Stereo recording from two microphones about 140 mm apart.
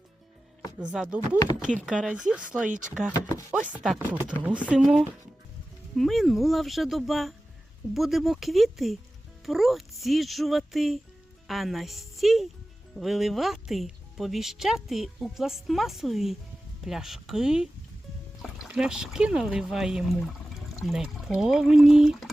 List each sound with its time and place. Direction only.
0.9 s speech: 5° right (ahead or behind)
1.4 s speech: 25° left (ahead or behind)
1.8 s a woman's voice: 5° right (ahead or behind)
18.7 s a woman's voice: 5° right (ahead or behind)